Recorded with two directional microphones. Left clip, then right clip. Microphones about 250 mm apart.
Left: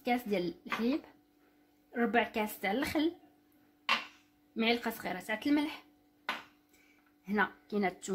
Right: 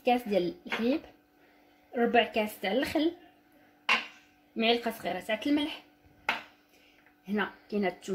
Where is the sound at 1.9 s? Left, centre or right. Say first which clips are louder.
Right 5 dB; centre.